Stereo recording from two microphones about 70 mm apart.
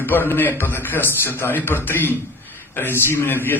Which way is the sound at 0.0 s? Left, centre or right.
Left.